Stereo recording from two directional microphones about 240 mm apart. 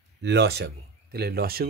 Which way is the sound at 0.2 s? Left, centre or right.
Right.